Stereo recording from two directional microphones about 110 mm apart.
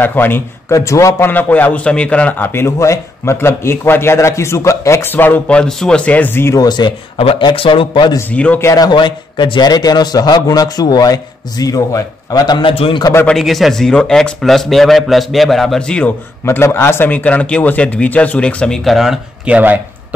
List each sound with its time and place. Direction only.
0.0 s a man's voice: 20° left (ahead or behind)
1.3 s a man's voice: 15° left (ahead or behind)
6.6 s a man's voice: 40° left (ahead or behind)
7.2 s a man's voice: 55° left (ahead or behind)
8.3 s a man's voice: 15° left (ahead or behind)
8.5 s a man's voice: 30° left (ahead or behind); by 13.0 s 55° left (ahead or behind)
13.3 s a man's voice: centre (ahead or behind)
16.4 s a man's voice: 25° left (ahead or behind); by 19.1 s centre (ahead or behind)
19.4 s speech: 15° right (ahead or behind)